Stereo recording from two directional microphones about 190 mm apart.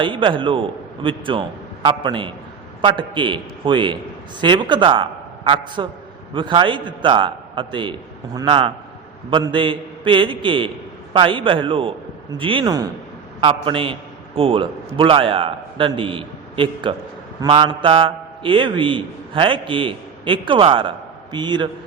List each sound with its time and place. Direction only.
0.0 s a man's voice: 25° right (ahead or behind)